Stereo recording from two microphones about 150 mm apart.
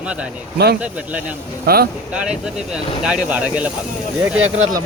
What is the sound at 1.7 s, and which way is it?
Speech, 90° right.